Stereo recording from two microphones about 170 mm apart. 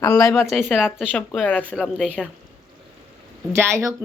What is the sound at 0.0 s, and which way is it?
Speech, 20° left (ahead or behind).